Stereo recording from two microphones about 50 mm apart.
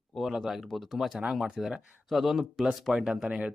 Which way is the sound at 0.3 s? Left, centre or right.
Centre.